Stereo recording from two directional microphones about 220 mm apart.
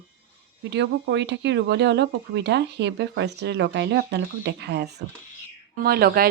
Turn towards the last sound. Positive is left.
turn(degrees=-45)  # may be behind; listen again after turning